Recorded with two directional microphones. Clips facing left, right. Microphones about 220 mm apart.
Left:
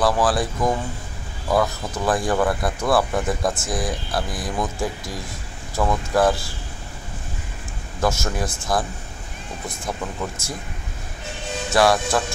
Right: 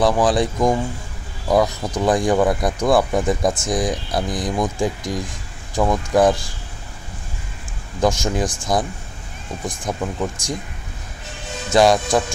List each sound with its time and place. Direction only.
0.0 s speech: 20° right (ahead or behind)
8.0 s speech: 15° right (ahead or behind)
10.2 s speech: 15° right (ahead or behind)
11.7 s speech: 20° right (ahead or behind)